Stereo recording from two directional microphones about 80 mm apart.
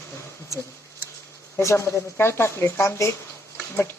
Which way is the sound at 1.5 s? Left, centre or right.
Left.